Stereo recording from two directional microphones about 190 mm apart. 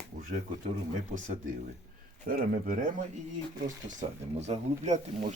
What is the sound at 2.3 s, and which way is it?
Speech, 50° right (ahead or behind).